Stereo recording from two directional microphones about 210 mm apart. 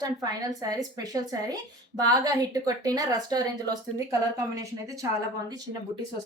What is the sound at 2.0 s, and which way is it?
A woman's voice, 20° right (ahead or behind).